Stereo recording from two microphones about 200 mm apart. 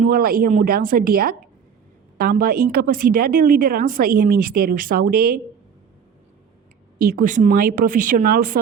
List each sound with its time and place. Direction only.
0.0 s a woman's voice: 45° right (ahead or behind)
7.0 s a woman's voice: 45° right (ahead or behind)